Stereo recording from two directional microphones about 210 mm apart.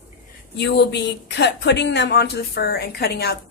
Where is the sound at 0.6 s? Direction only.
55° left (ahead or behind).